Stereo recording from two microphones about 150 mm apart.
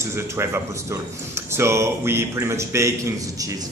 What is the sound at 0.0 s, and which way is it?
Speech, 15° right (ahead or behind).